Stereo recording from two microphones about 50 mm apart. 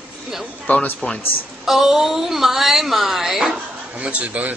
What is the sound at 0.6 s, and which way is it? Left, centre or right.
Speech, left.